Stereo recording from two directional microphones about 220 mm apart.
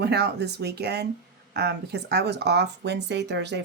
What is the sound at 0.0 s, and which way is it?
Speech, 50° right (ahead or behind).